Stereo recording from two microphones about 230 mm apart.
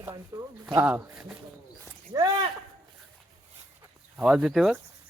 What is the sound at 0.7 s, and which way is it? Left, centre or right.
Speech, centre.